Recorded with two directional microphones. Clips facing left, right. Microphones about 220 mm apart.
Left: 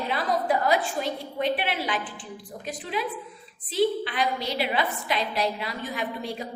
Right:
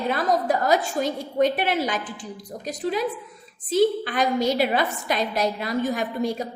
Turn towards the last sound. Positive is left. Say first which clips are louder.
# right 6 dB
turn(degrees=-45)  # may be behind; listen again after turning